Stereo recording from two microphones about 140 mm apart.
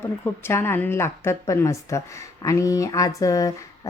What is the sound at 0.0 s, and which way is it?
A woman's voice, 15° left (ahead or behind).